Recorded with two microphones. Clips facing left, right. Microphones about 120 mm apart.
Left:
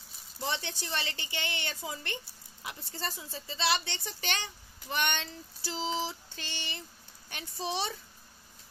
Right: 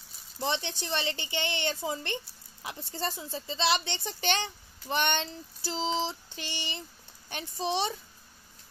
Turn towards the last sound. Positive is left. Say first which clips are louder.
# right 4 dB
turn(degrees=-20)  # may be behind; listen again after turning